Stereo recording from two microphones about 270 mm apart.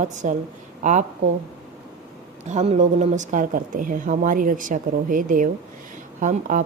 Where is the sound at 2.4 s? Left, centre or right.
Right.